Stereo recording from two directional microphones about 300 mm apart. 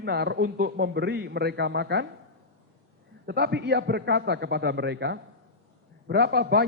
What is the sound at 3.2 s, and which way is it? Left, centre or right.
A man's voice, right.